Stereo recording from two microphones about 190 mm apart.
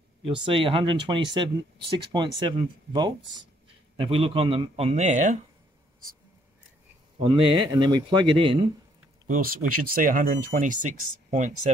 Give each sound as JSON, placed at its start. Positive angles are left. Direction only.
{"t": 0.5, "sound": "a man's voice", "side_deg": -30}
{"t": 7.2, "sound": "speech", "side_deg": -25}
{"t": 9.3, "sound": "speech", "side_deg": -45}